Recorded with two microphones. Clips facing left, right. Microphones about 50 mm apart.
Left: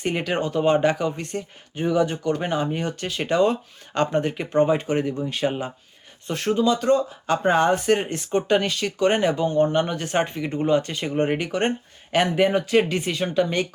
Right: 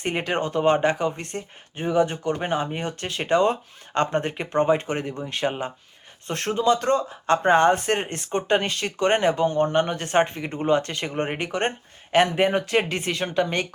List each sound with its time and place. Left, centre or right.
0.0 s speech: right
11.1 s speech: right
11.3 s speech: right